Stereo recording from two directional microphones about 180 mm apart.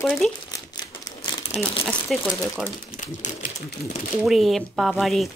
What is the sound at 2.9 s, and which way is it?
Speech, 45° left (ahead or behind).